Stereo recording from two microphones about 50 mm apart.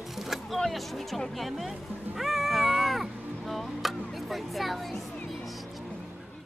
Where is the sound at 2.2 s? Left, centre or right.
Centre.